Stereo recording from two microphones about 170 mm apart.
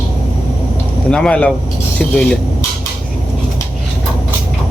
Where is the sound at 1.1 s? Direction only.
5° left (ahead or behind).